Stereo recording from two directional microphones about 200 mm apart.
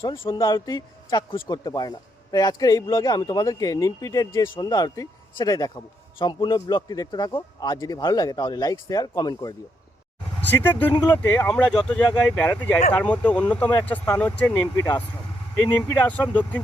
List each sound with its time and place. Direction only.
0.1 s a man's voice: 25° left (ahead or behind); by 10.9 s 10° left (ahead or behind)
10.9 s a man's voice: 20° left (ahead or behind)
11.2 s speech: 10° left (ahead or behind)